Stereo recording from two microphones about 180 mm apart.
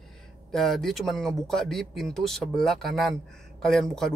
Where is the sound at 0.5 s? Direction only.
Centre (ahead or behind).